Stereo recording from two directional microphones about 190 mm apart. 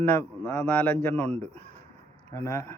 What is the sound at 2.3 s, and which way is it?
Speech, 15° left (ahead or behind).